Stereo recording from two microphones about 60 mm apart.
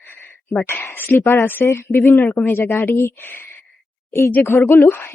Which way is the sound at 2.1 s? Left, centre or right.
Left.